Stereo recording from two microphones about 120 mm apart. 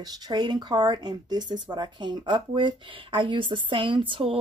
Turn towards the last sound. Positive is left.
turn(degrees=-50)  # may be behind; listen again after turning